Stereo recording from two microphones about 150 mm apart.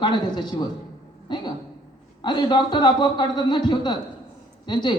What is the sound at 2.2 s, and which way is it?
A man's voice, 30° left (ahead or behind).